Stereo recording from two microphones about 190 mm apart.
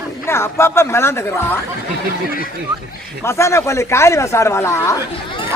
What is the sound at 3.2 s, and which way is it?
Speech, 15° left (ahead or behind).